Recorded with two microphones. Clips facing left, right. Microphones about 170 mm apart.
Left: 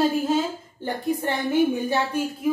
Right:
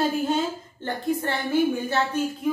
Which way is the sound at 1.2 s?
20° left (ahead or behind).